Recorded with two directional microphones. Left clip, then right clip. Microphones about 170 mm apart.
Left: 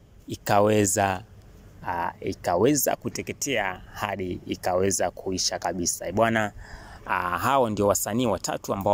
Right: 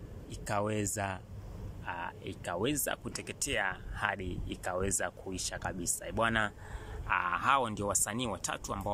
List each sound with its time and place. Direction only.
0.3 s speech: 50° left (ahead or behind)
1.9 s speech: 35° left (ahead or behind)
7.1 s speech: 35° left (ahead or behind)